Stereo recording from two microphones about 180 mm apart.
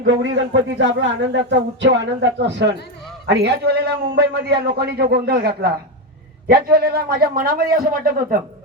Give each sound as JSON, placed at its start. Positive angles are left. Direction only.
{"t": 0.0, "sound": "a man's voice", "side_deg": -85}